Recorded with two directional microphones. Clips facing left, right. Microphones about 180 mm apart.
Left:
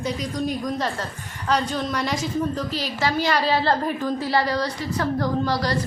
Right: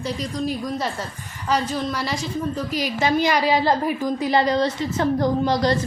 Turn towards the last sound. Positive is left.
turn(degrees=-20)  # may be behind; listen again after turning